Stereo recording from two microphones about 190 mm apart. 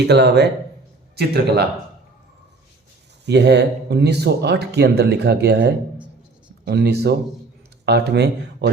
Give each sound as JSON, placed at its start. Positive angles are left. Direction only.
{"t": 0.1, "sound": "speech", "side_deg": -60}
{"t": 3.2, "sound": "speech", "side_deg": -65}